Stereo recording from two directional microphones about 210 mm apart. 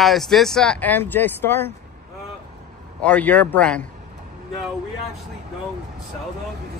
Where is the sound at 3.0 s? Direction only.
5° left (ahead or behind).